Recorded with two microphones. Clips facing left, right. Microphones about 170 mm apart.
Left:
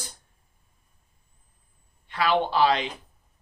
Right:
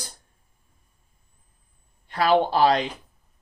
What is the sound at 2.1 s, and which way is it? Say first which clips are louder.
Speech: right 4 dB; 40° right (ahead or behind).